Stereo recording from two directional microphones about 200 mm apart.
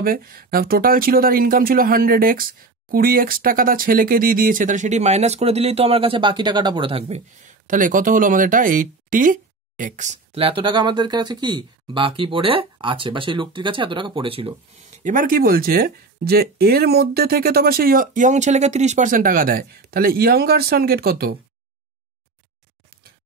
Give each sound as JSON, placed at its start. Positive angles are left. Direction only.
{"t": 0.0, "sound": "speech", "side_deg": -45}
{"t": 15.0, "sound": "speech", "side_deg": -45}